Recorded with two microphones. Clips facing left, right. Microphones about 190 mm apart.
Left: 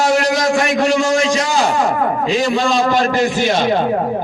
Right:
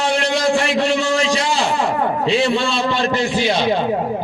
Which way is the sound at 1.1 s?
35° right (ahead or behind).